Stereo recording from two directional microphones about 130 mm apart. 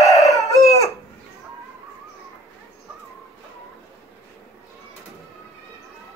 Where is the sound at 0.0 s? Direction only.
25° left (ahead or behind).